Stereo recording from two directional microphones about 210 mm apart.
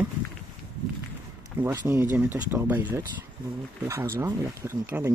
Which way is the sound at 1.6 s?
15° right (ahead or behind).